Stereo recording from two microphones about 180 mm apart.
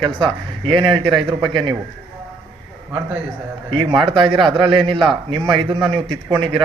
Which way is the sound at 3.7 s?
25° right (ahead or behind).